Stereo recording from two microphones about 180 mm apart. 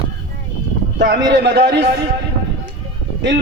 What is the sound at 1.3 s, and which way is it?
Speech, 70° right (ahead or behind).